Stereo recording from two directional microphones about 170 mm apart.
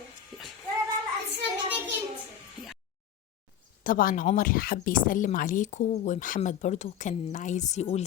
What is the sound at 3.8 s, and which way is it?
Speech, 55° left (ahead or behind).